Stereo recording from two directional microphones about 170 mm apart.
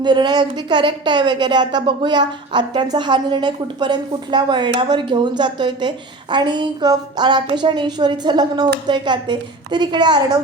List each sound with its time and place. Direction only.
0.0 s speech: 25° right (ahead or behind)